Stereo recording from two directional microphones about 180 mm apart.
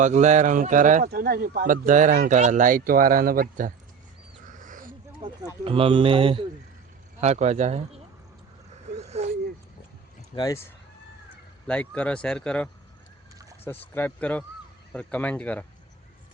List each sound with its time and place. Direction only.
0.0 s speech: 40° right (ahead or behind)
1.1 s speech: 60° right (ahead or behind)
4.4 s dog: 45° right (ahead or behind)
5.6 s a man's voice: 30° right (ahead or behind)
9.0 s a sound: 35° right (ahead or behind)
10.3 s speech: 20° left (ahead or behind)
11.6 s speech: 5° left (ahead or behind)